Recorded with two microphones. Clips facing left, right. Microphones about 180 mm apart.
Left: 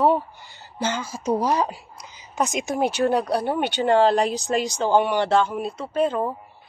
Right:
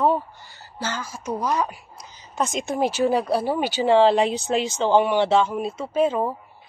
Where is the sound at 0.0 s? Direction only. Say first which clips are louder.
Left 1 dB; 15° left (ahead or behind).